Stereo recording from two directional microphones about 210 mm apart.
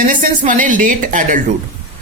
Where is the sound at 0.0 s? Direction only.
40° right (ahead or behind).